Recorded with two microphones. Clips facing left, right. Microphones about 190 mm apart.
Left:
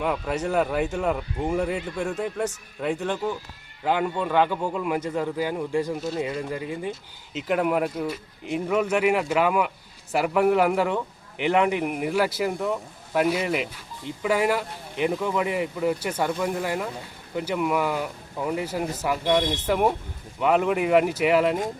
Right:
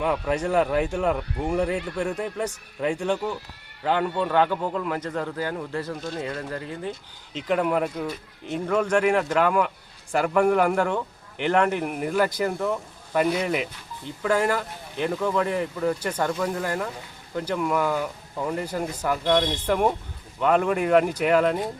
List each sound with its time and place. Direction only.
0.0 s a man's voice: 5° left (ahead or behind)